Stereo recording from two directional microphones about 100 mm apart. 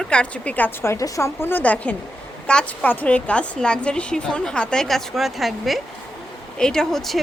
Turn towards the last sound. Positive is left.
turn(degrees=5)  # may be behind; listen again after turning